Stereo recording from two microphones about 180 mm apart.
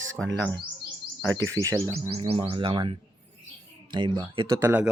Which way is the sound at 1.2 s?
90° right.